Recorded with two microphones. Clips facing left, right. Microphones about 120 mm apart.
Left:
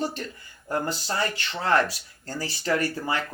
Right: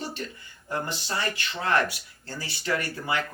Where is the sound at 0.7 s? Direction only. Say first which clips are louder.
Left 3 dB; 35° left (ahead or behind).